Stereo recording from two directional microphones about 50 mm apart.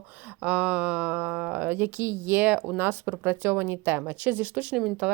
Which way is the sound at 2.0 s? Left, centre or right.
Right.